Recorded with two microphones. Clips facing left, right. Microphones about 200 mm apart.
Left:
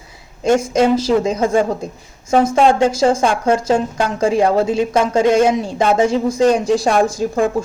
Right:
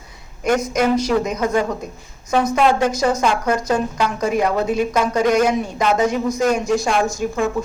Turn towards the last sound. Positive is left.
turn(degrees=30)  # may be behind; listen again after turning